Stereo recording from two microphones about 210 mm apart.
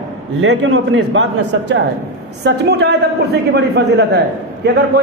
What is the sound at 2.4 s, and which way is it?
A man's voice, 55° right (ahead or behind).